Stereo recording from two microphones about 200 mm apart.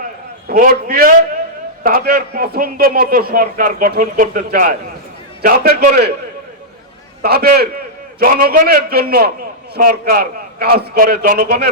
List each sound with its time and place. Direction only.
0.4 s a man's voice: 45° right (ahead or behind)
7.2 s a man's voice: 50° right (ahead or behind)